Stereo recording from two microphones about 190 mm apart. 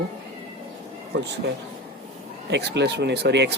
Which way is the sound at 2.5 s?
60° right (ahead or behind).